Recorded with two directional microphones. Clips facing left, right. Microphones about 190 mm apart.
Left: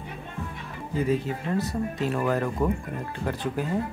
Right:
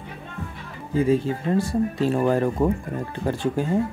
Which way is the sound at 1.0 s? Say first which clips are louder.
Right 5 dB; 30° right (ahead or behind).